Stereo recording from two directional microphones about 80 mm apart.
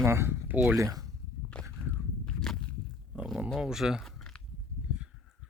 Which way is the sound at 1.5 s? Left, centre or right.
Centre.